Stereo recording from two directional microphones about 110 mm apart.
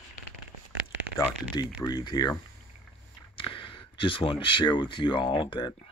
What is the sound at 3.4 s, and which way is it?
Speech, 55° left (ahead or behind).